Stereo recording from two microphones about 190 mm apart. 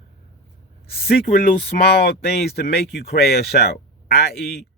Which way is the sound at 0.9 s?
55° left (ahead or behind).